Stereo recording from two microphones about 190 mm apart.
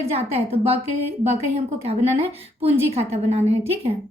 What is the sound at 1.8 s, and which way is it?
A woman's voice, 30° right (ahead or behind).